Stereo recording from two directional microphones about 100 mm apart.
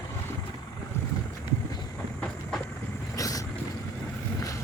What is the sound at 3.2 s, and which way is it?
Vehicle, 35° left (ahead or behind).